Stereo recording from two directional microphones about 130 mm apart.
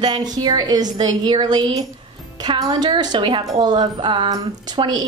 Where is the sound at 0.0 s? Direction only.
35° right (ahead or behind).